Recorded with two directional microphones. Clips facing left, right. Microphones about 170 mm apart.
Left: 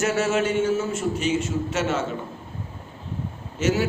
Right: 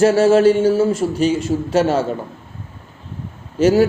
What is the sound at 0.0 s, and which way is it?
A man's voice, 35° right (ahead or behind).